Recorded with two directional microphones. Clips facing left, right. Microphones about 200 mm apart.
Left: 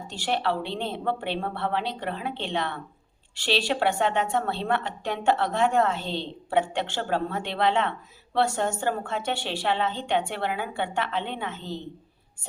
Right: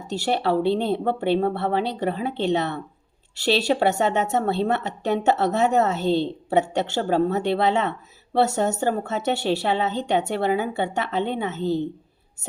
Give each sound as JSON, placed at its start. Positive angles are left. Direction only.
{"t": 0.1, "sound": "speech", "side_deg": -40}